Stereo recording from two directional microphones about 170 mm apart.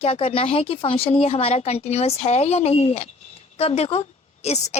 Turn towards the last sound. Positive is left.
turn(degrees=40)  # may be behind; listen again after turning